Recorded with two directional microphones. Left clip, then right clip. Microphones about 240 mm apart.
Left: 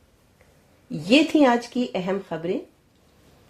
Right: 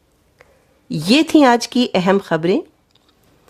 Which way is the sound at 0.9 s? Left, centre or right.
Right.